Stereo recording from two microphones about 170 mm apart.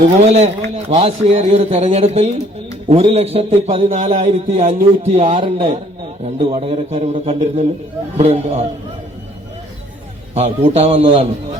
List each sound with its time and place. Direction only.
0.2 s a man's voice: 40° right (ahead or behind)
10.3 s a man's voice: 40° right (ahead or behind)